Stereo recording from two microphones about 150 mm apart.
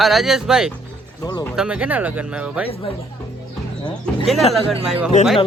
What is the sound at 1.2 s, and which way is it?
Speech, 25° left (ahead or behind).